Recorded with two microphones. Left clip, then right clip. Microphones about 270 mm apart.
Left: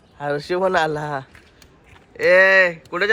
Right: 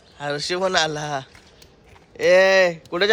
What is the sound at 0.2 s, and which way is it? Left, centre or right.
Speech, centre.